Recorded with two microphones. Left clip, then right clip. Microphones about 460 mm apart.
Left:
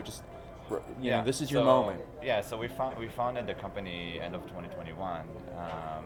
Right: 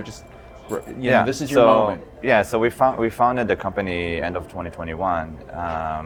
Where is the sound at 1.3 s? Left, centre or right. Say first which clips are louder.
Right 7 dB; right.